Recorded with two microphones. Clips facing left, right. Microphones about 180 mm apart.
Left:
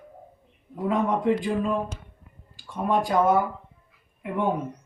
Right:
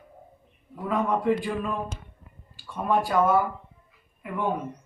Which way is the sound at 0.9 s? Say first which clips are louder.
Left 1 dB; 20° left (ahead or behind).